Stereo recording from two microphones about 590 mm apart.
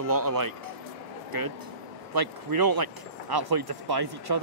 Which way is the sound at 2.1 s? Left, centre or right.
Right.